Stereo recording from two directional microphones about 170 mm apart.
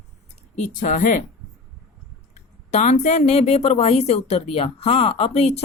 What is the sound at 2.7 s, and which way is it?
Speech, 40° left (ahead or behind).